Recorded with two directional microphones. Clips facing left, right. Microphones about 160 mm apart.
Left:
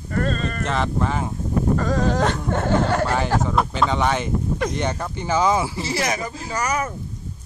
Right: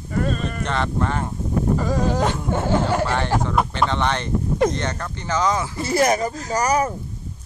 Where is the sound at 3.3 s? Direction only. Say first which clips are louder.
Even; 5° left (ahead or behind).